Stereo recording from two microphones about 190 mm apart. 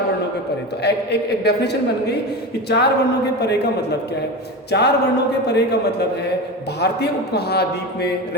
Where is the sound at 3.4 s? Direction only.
60° left (ahead or behind).